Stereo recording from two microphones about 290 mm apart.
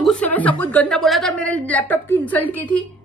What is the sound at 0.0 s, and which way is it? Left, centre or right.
A woman's voice, centre.